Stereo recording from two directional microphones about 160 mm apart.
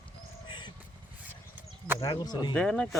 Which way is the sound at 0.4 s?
30° left (ahead or behind).